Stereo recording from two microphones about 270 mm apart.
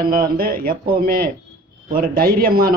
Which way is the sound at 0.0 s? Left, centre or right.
Right.